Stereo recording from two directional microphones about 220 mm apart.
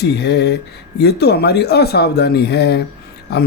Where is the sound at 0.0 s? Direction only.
50° left (ahead or behind).